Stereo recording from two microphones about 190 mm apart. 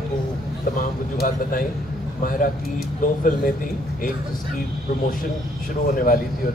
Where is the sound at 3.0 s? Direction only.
45° left (ahead or behind).